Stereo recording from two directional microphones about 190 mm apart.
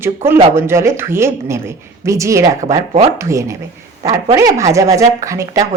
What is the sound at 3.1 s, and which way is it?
Speech, 15° right (ahead or behind).